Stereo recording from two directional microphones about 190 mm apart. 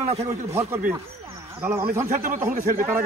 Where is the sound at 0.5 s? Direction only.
10° right (ahead or behind).